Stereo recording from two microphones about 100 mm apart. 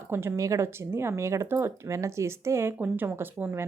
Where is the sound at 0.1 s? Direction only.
25° right (ahead or behind).